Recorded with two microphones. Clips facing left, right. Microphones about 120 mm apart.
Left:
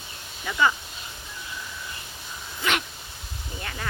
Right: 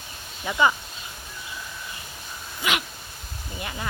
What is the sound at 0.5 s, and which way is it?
Speech, 20° right (ahead or behind).